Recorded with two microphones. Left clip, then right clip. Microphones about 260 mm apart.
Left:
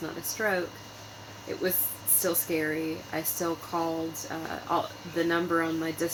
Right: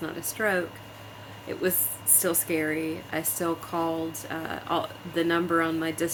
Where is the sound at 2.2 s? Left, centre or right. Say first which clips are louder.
Right 1 dB; right.